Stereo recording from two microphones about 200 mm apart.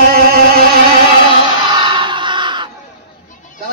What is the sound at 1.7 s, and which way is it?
Crowd, 25° right (ahead or behind).